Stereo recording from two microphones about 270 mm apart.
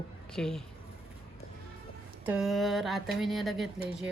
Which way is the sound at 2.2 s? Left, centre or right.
Centre.